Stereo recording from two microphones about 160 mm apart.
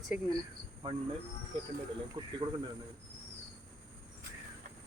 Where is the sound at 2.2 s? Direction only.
35° right (ahead or behind).